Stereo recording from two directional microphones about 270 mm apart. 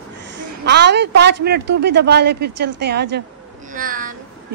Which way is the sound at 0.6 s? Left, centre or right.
Right.